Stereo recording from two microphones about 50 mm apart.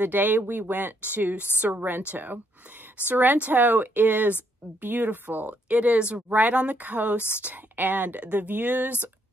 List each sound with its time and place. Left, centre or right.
0.0 s a woman's voice: right